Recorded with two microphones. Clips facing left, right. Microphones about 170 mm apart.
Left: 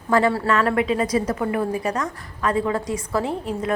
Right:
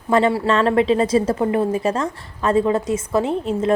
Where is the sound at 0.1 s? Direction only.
20° right (ahead or behind).